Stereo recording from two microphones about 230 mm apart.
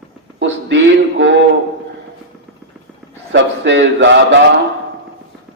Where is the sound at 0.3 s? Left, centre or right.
Right.